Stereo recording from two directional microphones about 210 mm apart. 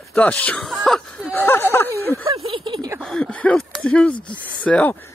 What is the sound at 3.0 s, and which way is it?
Speech, 5° left (ahead or behind).